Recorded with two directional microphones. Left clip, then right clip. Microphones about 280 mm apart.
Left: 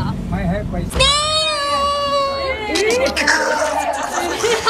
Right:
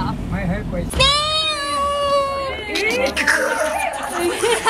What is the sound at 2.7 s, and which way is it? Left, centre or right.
Speech, centre.